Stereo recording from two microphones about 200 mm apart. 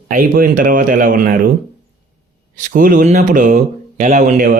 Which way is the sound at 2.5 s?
45° right (ahead or behind).